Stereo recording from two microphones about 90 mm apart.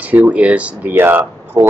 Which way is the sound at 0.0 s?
15° right (ahead or behind).